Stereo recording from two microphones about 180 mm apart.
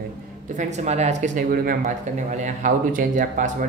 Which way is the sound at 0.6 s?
40° right (ahead or behind).